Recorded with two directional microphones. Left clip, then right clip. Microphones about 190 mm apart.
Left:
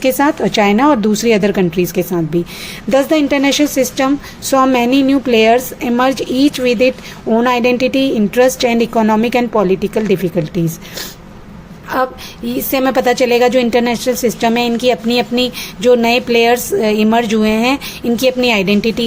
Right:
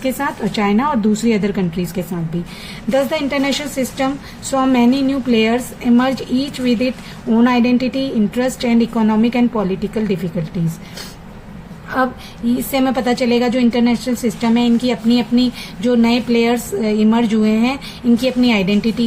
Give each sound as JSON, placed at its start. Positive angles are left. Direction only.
{"t": 0.0, "sound": "a woman's voice", "side_deg": 50}
{"t": 2.9, "sound": "a woman's voice", "side_deg": 50}
{"t": 12.7, "sound": "a woman's voice", "side_deg": 50}